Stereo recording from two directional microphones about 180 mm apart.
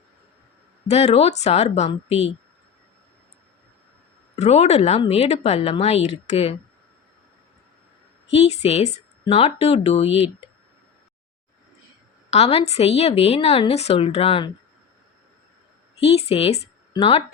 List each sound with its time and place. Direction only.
0.9 s speech: 35° left (ahead or behind)
4.4 s speech: 40° left (ahead or behind)
8.3 s speech: 35° left (ahead or behind)
12.3 s speech: 35° left (ahead or behind)
16.0 s speech: 35° left (ahead or behind)